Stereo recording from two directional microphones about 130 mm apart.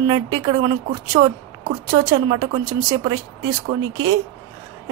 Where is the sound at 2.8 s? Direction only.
30° right (ahead or behind).